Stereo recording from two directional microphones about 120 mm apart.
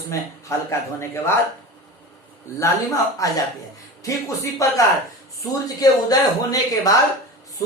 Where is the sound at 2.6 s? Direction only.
30° left (ahead or behind).